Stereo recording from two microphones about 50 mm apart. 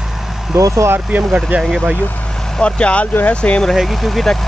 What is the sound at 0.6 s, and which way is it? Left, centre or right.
Speech, right.